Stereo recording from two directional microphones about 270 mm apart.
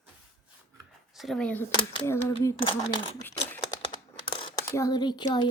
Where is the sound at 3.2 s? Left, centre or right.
Centre.